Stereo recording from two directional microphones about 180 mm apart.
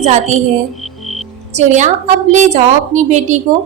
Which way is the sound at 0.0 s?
40° right (ahead or behind).